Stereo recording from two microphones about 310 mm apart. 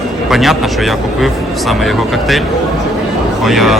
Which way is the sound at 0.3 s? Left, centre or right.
Centre.